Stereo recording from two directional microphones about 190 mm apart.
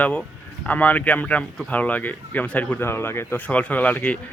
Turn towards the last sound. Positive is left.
turn(degrees=10)  # may be behind; listen again after turning